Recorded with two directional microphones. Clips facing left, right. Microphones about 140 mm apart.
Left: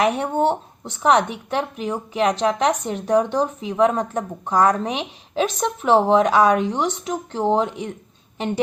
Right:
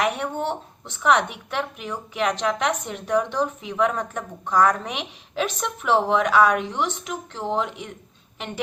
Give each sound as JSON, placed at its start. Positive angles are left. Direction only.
{"t": 0.0, "sound": "a woman's voice", "side_deg": 35}